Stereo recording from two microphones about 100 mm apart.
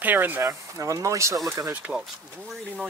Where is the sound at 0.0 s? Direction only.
20° right (ahead or behind).